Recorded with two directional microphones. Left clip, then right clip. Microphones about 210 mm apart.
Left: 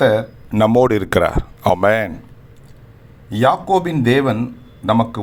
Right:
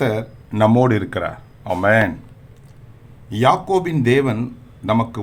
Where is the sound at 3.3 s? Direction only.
5° left (ahead or behind).